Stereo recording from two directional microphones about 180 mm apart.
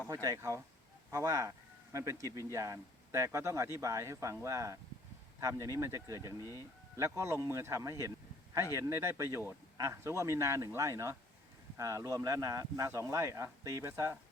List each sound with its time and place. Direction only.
0.1 s speech: 20° right (ahead or behind)
6.4 s speech: 20° left (ahead or behind)
6.9 s speech: 15° right (ahead or behind)